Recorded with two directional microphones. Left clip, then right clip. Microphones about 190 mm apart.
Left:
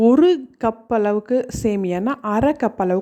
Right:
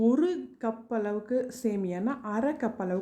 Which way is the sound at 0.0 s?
40° left (ahead or behind).